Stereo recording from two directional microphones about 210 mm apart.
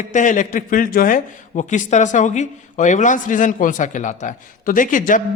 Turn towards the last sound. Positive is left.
turn(degrees=40)  # may be behind; listen again after turning